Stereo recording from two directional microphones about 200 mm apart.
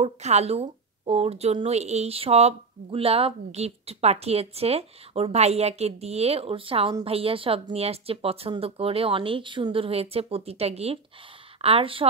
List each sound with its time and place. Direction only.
0.0 s speech: 35° right (ahead or behind)